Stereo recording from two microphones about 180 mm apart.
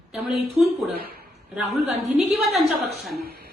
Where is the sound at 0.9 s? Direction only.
60° right (ahead or behind).